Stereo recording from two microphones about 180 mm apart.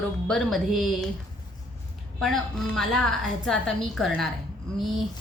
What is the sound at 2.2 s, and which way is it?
A woman's voice, centre (ahead or behind).